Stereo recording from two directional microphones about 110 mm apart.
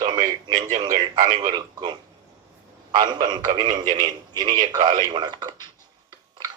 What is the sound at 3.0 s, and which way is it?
A man's voice, 40° right (ahead or behind).